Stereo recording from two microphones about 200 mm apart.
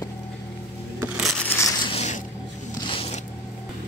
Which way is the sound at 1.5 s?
15° left (ahead or behind).